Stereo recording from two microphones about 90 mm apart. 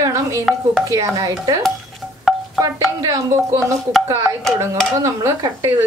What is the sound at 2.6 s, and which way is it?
A woman's voice, 35° right (ahead or behind).